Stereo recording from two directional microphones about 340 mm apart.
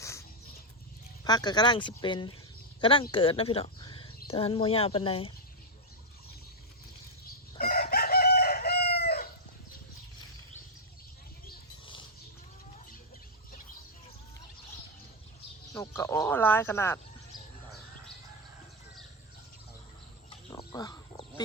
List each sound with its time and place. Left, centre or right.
0.0 s dog: centre
1.2 s speech: centre
7.6 s chicken: left
15.7 s a sound: centre
20.5 s fowl: centre